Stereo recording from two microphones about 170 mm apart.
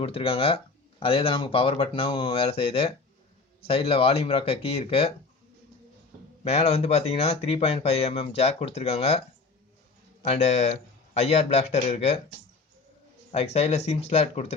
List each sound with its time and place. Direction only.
0.0 s speech: 35° left (ahead or behind)
6.4 s speech: 35° left (ahead or behind)
10.2 s speech: 40° left (ahead or behind)
13.3 s speech: 40° left (ahead or behind)